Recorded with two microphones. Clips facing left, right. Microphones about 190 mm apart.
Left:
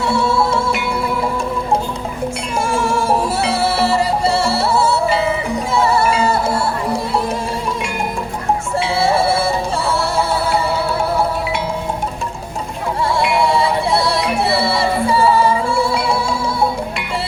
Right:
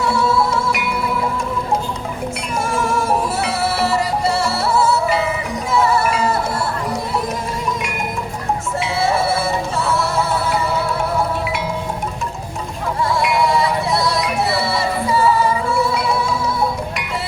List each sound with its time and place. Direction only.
0.0 s music: 25° left (ahead or behind)
2.6 s music: 30° left (ahead or behind)
8.8 s music: 30° left (ahead or behind)
13.0 s music: 30° left (ahead or behind)